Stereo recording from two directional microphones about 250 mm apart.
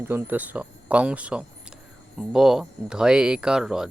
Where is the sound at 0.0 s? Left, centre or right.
Centre.